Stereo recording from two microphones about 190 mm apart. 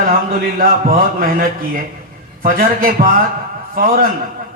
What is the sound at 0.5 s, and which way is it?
A man's voice, 50° right (ahead or behind).